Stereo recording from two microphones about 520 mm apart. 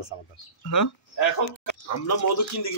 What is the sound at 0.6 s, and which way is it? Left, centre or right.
Speech, left.